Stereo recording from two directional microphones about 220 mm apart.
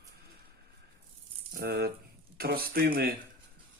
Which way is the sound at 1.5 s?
45° right (ahead or behind).